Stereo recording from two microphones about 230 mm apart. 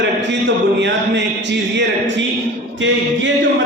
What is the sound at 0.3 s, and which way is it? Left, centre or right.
Speech, right.